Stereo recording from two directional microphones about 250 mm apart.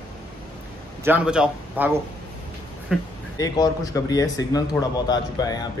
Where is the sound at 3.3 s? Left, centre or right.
Centre.